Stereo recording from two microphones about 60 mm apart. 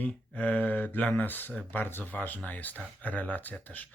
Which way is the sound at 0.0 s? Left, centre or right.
Left.